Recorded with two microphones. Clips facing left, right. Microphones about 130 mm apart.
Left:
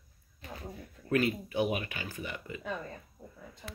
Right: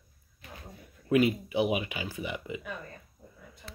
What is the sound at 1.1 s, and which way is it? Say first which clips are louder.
Speech: right 4 dB; 15° right (ahead or behind).